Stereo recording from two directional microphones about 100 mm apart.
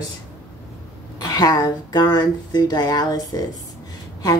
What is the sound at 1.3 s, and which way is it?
Speech, 40° left (ahead or behind).